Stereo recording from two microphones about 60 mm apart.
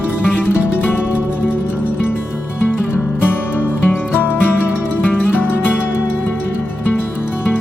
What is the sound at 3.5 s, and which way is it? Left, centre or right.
Music, left.